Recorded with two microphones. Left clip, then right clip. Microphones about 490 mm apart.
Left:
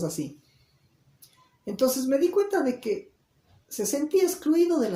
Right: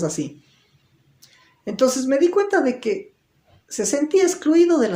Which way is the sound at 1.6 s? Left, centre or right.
Right.